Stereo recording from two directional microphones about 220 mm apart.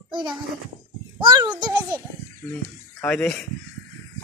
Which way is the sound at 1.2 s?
20° right (ahead or behind).